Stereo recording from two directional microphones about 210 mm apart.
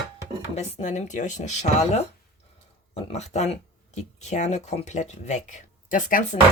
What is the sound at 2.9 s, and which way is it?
Speech, 30° left (ahead or behind).